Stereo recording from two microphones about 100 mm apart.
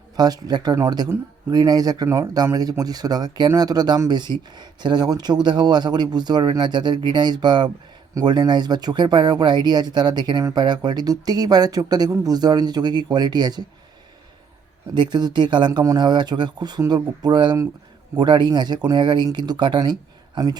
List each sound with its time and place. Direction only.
0.2 s speech: 45° right (ahead or behind)
15.1 s speech: 45° right (ahead or behind)